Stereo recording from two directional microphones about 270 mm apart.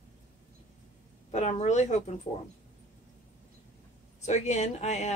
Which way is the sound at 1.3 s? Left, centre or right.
Left.